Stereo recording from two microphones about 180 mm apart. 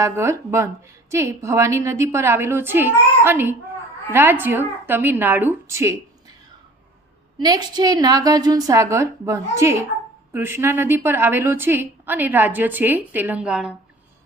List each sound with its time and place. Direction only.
0.0 s a woman's voice: 15° right (ahead or behind)
7.4 s a woman's voice: 20° right (ahead or behind); by 13.7 s 5° right (ahead or behind)